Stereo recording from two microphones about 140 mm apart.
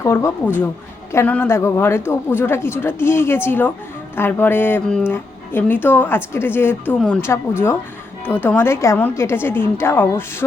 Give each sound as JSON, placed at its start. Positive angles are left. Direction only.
{"t": 0.0, "sound": "a woman's voice", "side_deg": 20}